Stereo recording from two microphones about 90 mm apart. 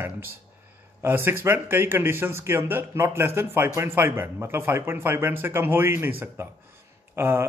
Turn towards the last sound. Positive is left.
turn(degrees=-25)  # may be behind; listen again after turning